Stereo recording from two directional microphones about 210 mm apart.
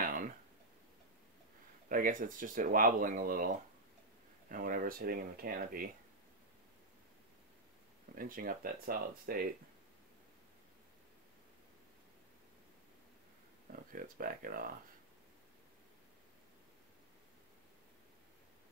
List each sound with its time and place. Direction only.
0.0 s a sound: 40° right (ahead or behind)
1.9 s speech: 40° right (ahead or behind)
8.1 s speech: 40° right (ahead or behind)
13.7 s speech: 40° right (ahead or behind)